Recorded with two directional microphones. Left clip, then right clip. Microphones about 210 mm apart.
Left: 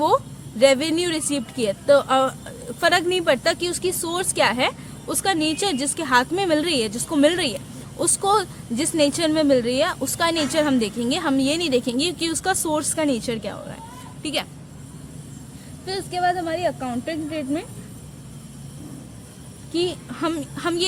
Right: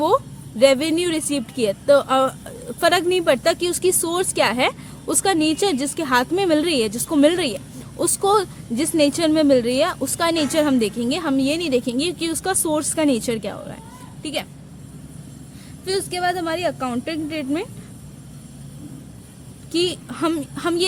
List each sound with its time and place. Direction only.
0.6 s a woman's voice: 20° right (ahead or behind)
15.9 s speech: 40° right (ahead or behind)
19.7 s a woman's voice: 35° right (ahead or behind)